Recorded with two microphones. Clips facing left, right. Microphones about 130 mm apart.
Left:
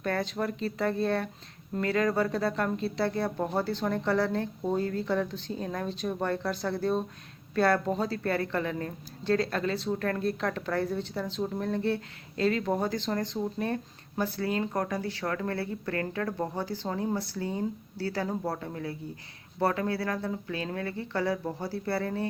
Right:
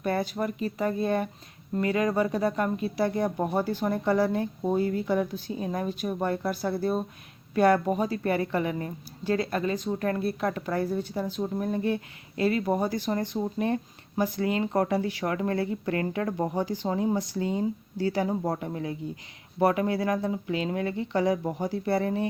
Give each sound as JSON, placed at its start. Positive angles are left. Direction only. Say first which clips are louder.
{"t": 0.0, "sound": "a woman's voice", "louder": "right 2 dB", "side_deg": -10}
{"t": 14.8, "sound": "speech", "louder": "right 6 dB", "side_deg": -30}
{"t": 15.0, "sound": "a woman's voice", "louder": "right 3 dB", "side_deg": -15}